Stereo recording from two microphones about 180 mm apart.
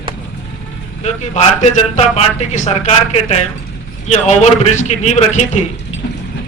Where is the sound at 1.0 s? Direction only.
40° left (ahead or behind).